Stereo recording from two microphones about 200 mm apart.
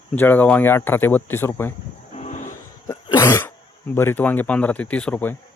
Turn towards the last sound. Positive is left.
turn(degrees=5)  # may be behind; listen again after turning